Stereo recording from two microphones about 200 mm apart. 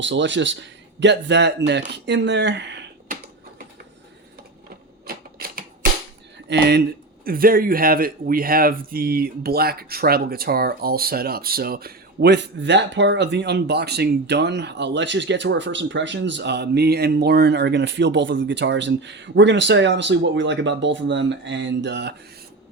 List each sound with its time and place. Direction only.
0.0 s speech: 65° right (ahead or behind)
5.0 s typewriter: 50° right (ahead or behind)
6.5 s speech: 55° right (ahead or behind)